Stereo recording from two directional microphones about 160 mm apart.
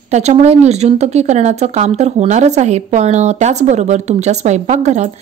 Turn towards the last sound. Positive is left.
turn(degrees=-50)  # may be behind; listen again after turning